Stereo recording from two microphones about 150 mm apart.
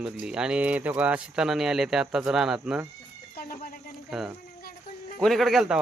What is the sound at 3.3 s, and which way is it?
Speech, 80° left.